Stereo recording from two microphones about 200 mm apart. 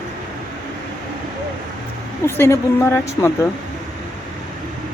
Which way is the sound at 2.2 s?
10° left (ahead or behind).